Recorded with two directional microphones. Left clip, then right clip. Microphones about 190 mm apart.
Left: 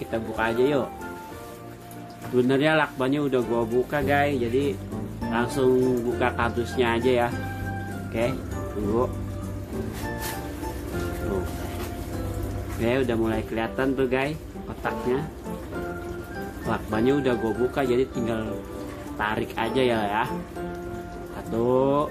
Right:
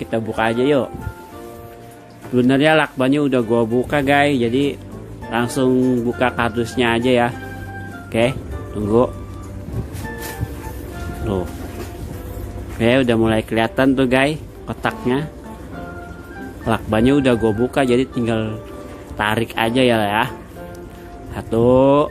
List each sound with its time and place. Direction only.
0.0 s speech: 35° right (ahead or behind)
2.3 s speech: 30° right (ahead or behind)
12.8 s speech: 40° right (ahead or behind)
14.8 s music: 45° right (ahead or behind)
16.6 s speech: 40° right (ahead or behind)
21.5 s speech: 35° right (ahead or behind)